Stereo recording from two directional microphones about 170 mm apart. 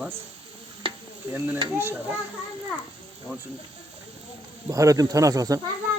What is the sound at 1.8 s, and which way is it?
Speech, 15° right (ahead or behind).